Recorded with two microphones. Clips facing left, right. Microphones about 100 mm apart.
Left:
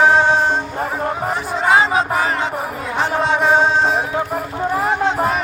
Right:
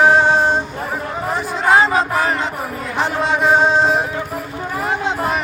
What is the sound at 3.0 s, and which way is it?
Music, centre (ahead or behind).